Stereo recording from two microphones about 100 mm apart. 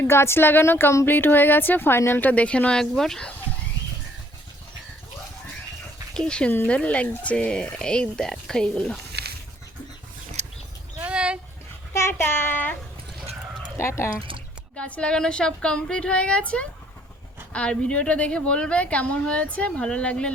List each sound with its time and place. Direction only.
0.0 s a woman's voice: 25° left (ahead or behind); by 3.3 s 5° left (ahead or behind)
6.1 s a woman's voice: 10° left (ahead or behind)
11.0 s a sound: 10° right (ahead or behind)
11.9 s child singing: 25° left (ahead or behind)
13.7 s a woman's voice: 25° left (ahead or behind)
14.2 s speech: 60° right (ahead or behind)
14.8 s a woman's voice: 10° left (ahead or behind)